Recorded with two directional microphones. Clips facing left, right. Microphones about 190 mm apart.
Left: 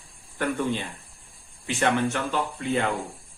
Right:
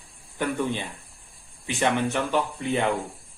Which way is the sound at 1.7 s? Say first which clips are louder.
Even; 15° right (ahead or behind).